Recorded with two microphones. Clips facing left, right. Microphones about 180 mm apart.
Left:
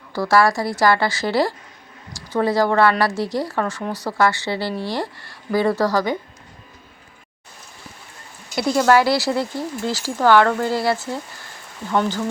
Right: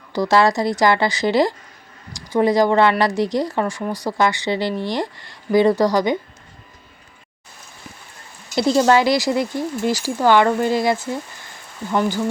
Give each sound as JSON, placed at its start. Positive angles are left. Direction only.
{"t": 0.1, "sound": "speech", "side_deg": -20}
{"t": 8.5, "sound": "speech", "side_deg": -25}